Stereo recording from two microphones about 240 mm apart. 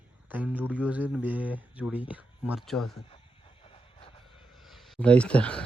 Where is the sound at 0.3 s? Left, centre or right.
Centre.